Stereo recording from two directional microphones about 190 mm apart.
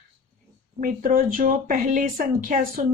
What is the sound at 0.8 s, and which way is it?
A woman's voice, 45° right (ahead or behind).